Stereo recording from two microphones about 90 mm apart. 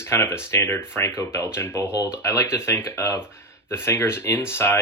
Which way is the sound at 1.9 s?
15° right (ahead or behind).